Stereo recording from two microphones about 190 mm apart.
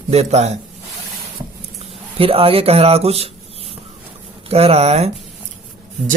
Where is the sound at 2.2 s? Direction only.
30° right (ahead or behind).